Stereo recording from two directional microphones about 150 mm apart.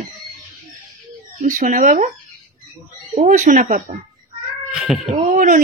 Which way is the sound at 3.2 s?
55° right (ahead or behind).